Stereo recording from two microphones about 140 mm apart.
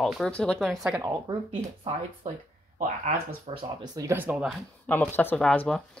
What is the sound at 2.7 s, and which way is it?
Speech, 65° right (ahead or behind).